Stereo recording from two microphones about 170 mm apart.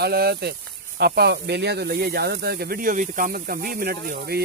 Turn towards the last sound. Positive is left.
turn(degrees=-65)  # may be behind; listen again after turning